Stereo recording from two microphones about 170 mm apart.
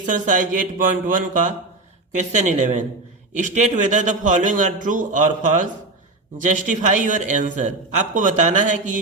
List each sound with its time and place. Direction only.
0.0 s a man's voice: 50° right (ahead or behind)